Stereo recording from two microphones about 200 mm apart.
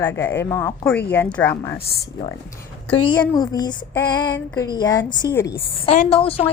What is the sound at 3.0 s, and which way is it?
Child singing, 20° left (ahead or behind).